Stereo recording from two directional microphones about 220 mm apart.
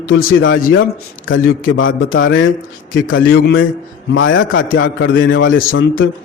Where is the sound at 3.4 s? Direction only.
40° left (ahead or behind).